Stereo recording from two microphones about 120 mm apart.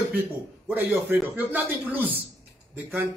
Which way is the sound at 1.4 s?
15° right (ahead or behind).